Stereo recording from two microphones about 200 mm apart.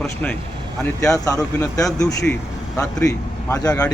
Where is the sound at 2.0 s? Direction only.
5° left (ahead or behind).